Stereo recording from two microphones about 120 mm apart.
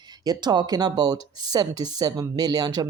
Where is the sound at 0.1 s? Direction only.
35° right (ahead or behind).